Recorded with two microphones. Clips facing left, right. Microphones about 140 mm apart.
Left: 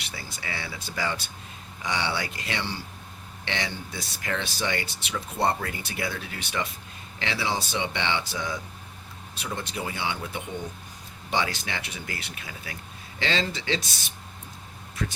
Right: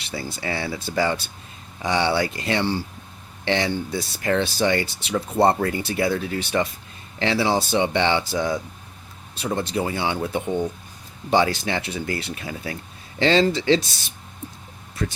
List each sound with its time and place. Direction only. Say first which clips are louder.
0.0 s speech: right 9 dB; 30° right (ahead or behind)